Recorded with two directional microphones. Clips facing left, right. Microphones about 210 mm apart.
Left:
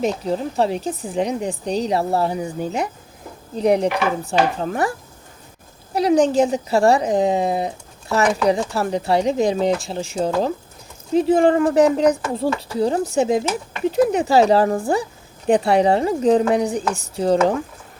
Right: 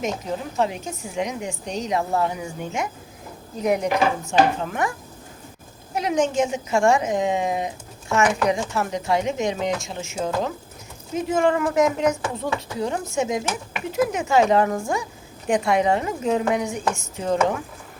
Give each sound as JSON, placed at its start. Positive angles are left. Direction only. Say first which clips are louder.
{"t": 0.0, "sound": "a woman's voice", "louder": "left 6 dB", "side_deg": 35}